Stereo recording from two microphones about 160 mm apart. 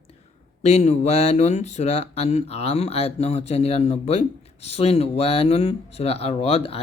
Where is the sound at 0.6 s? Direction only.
45° left (ahead or behind).